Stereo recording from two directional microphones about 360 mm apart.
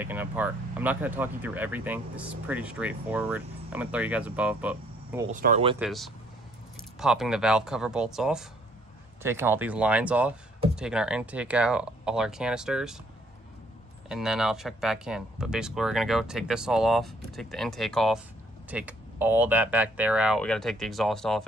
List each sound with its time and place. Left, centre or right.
0.0 s speech: centre
5.3 s speech: right
5.8 s speech: centre
14.0 s speech: centre